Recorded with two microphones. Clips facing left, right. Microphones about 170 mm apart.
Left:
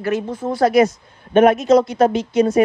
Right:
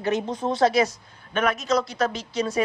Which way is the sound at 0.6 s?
50° left (ahead or behind).